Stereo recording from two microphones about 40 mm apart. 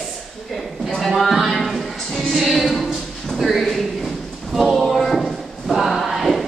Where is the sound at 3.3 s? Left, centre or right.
Centre.